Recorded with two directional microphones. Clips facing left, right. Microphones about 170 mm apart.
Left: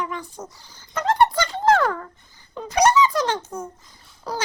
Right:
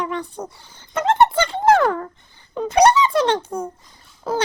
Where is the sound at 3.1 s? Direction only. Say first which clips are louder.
Right 5 dB; 30° right (ahead or behind).